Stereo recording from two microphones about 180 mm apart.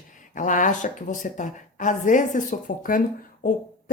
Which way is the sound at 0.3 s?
45° left (ahead or behind).